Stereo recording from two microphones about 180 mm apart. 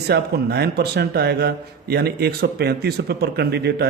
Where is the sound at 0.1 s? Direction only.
65° right (ahead or behind).